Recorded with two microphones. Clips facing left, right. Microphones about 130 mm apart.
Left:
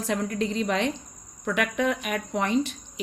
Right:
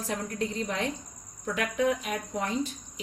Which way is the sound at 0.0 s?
90° left.